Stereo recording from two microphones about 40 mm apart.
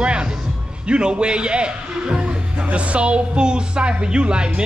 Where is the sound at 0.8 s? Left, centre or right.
Right.